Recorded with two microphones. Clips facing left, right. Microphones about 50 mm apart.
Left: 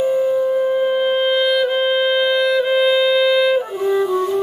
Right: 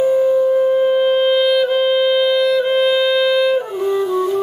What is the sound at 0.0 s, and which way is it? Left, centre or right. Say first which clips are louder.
Music: right 3 dB; centre.